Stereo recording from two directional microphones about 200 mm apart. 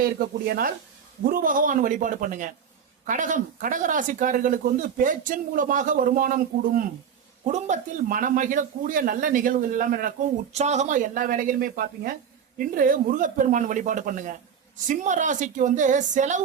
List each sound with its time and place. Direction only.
0.0 s a man's voice: 50° right (ahead or behind)